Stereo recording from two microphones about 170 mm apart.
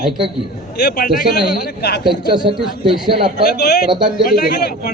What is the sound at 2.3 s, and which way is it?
Speech, 25° right (ahead or behind).